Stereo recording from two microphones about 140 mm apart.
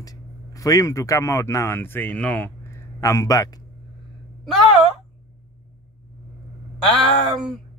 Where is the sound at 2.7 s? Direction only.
20° left (ahead or behind).